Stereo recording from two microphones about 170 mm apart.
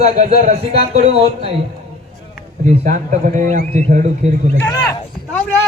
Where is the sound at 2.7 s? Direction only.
50° right (ahead or behind).